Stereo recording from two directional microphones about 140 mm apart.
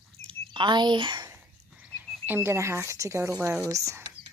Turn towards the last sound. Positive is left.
turn(degrees=-20)  # may be behind; listen again after turning